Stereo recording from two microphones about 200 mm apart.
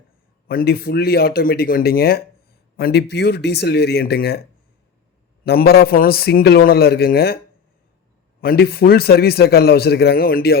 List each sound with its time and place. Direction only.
0.4 s a man's voice: 50° left (ahead or behind)
5.5 s a man's voice: 50° left (ahead or behind)
8.4 s a man's voice: 50° left (ahead or behind)